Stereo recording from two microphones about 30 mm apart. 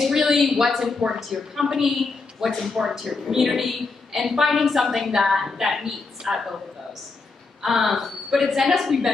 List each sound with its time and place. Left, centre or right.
0.0 s a woman's voice: centre
1.0 s a woman's voice: centre
7.6 s a woman's voice: centre